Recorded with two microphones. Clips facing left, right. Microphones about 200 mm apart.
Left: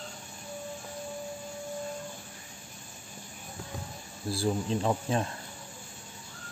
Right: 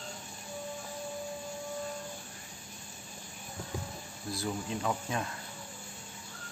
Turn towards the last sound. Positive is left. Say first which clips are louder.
# left 5 dB
turn(degrees=30)  # may be behind; listen again after turning